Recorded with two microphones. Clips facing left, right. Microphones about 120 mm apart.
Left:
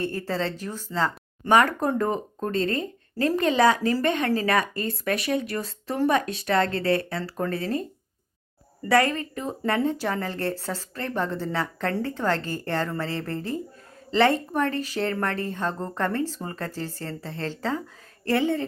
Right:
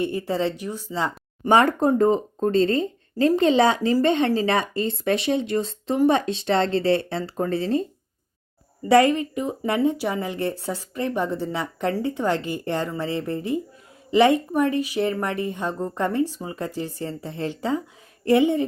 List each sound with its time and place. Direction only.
0.0 s speech: 15° right (ahead or behind)
1.5 s speech: 25° right (ahead or behind)
8.9 s speech: 20° right (ahead or behind)